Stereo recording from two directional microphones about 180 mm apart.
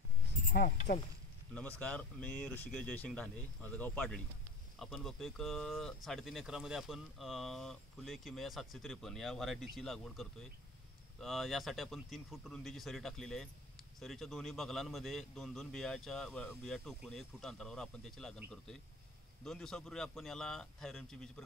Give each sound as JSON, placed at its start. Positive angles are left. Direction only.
{"t": 0.5, "sound": "speech", "side_deg": 55}
{"t": 1.5, "sound": "speech", "side_deg": 5}
{"t": 19.4, "sound": "speech", "side_deg": 0}